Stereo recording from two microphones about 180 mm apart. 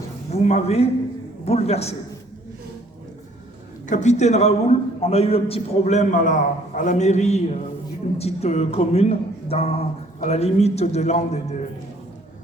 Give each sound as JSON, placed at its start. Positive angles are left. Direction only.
{"t": 0.3, "sound": "a man's voice", "side_deg": 35}
{"t": 3.8, "sound": "a man's voice", "side_deg": 40}